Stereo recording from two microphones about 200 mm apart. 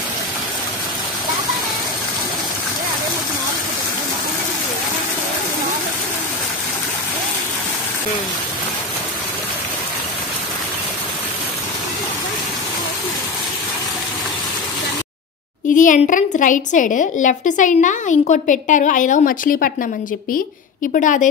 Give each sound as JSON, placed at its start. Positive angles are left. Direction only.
{"t": 15.7, "sound": "a woman's voice", "side_deg": 40}
{"t": 20.9, "sound": "a woman's voice", "side_deg": 40}